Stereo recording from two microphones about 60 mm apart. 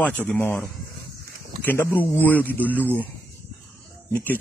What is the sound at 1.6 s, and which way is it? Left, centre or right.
Speech, left.